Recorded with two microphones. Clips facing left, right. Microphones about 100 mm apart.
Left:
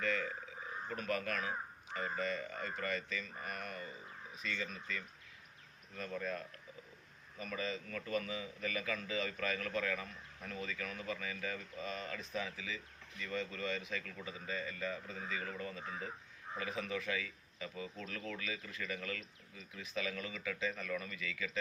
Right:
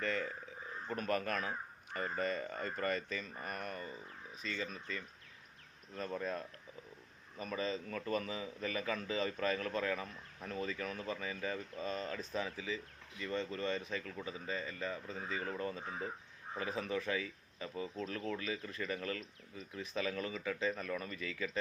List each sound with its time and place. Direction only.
0.9 s a man's voice: 40° right (ahead or behind)